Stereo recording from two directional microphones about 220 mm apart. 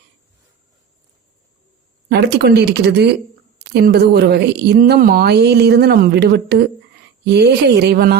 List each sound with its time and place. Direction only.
2.0 s speech: 50° right (ahead or behind)